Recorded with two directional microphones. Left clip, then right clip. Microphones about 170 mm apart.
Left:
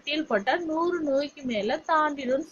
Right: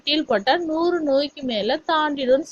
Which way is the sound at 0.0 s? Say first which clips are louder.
Right 6 dB; 40° right (ahead or behind).